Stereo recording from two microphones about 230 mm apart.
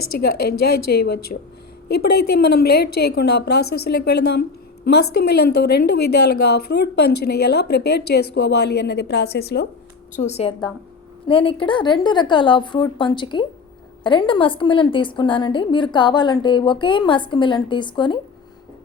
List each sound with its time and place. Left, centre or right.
0.3 s a woman's voice: left
10.2 s a woman's voice: left